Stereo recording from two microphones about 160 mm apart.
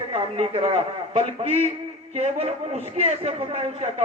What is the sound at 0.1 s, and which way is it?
A man's voice, 40° right (ahead or behind).